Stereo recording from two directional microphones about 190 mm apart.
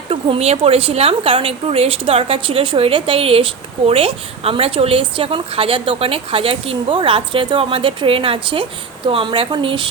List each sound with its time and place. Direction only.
0.1 s speech: 30° right (ahead or behind)